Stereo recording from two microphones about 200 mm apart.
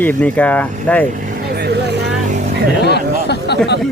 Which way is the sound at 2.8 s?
55° left (ahead or behind).